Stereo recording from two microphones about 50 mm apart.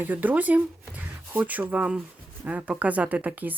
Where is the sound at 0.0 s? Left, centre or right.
Right.